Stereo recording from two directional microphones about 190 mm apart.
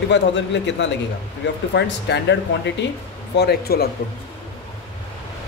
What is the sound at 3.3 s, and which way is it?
Speech, 55° left (ahead or behind).